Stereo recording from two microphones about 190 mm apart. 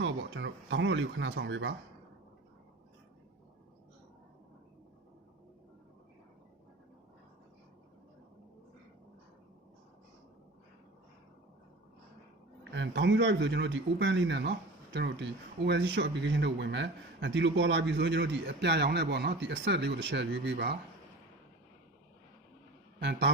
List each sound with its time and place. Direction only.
0.0 s speech: 70° right (ahead or behind)
12.7 s speech: 70° right (ahead or behind)
23.0 s speech: 65° right (ahead or behind)